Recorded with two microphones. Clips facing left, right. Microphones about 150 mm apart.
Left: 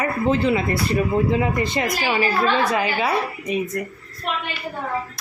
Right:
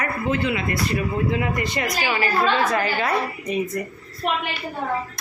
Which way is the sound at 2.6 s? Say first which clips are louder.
Left 1 dB; 10° left (ahead or behind).